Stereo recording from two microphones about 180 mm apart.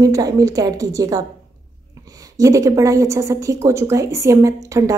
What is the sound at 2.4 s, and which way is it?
A woman's voice, 20° right (ahead or behind).